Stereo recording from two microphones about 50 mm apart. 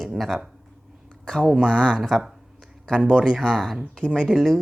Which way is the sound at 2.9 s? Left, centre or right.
Right.